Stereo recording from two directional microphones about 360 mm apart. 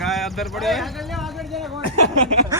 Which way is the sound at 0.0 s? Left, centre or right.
Centre.